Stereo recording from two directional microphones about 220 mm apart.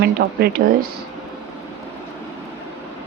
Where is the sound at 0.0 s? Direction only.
45° right (ahead or behind).